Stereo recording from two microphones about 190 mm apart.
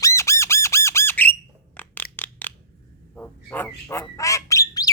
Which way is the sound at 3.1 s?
10° left (ahead or behind).